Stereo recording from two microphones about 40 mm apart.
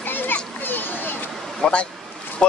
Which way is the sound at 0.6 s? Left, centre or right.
Left.